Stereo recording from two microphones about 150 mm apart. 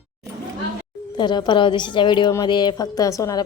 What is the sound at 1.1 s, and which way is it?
A woman's voice, 30° left (ahead or behind).